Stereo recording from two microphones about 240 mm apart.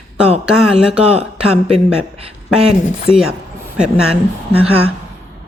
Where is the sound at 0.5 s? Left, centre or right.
Centre.